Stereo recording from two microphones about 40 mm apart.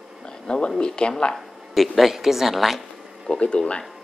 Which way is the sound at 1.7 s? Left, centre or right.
Centre.